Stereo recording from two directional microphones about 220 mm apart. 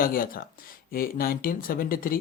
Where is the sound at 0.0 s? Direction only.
40° left (ahead or behind).